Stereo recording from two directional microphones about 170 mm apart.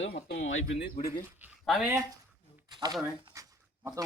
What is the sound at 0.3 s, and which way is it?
Speech, 90° left.